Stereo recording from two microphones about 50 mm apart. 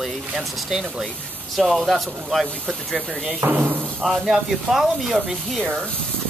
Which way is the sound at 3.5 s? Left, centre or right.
Right.